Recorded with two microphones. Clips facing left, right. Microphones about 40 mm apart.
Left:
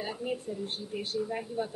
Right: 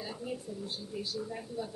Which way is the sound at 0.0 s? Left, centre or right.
Left.